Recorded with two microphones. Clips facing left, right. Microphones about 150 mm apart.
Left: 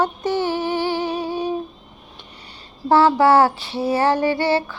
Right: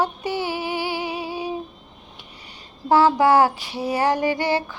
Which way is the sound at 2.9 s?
15° right (ahead or behind).